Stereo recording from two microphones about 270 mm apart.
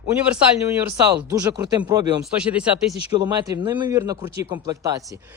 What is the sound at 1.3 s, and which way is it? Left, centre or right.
Speech, centre.